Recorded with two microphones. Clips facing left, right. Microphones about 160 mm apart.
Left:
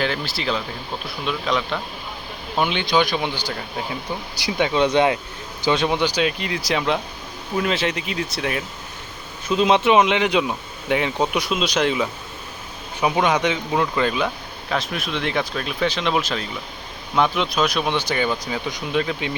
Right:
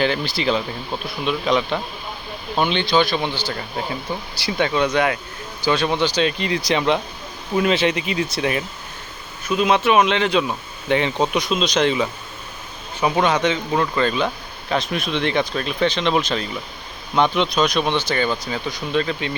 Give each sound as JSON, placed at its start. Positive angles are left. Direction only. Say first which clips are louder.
{"t": 0.0, "sound": "speech", "louder": "right 4 dB", "side_deg": 0}
{"t": 9.5, "sound": "speech", "louder": "left 1 dB", "side_deg": 25}